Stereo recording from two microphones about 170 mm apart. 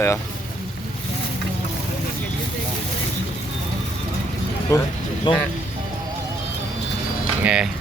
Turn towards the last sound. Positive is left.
turn(degrees=-5)  # may be behind; listen again after turning